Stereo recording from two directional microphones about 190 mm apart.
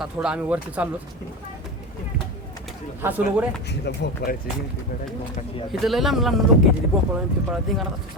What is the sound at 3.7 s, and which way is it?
Speech, 60° left (ahead or behind).